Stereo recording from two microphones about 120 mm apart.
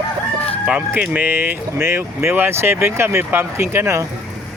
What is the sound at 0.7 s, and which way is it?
Speech, 15° right (ahead or behind).